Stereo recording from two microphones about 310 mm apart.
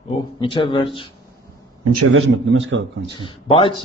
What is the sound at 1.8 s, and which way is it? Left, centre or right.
Speech, right.